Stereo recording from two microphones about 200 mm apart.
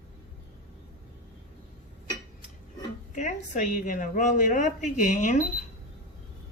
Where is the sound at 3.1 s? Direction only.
40° left (ahead or behind).